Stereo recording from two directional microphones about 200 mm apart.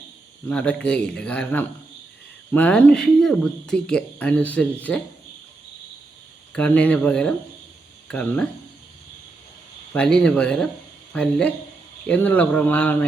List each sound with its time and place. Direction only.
0.4 s speech: 5° left (ahead or behind)
6.5 s speech: 5° left (ahead or behind)
9.9 s speech: 5° left (ahead or behind)